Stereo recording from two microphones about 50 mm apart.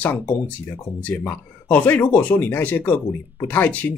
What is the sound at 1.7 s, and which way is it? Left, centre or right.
Speech, left.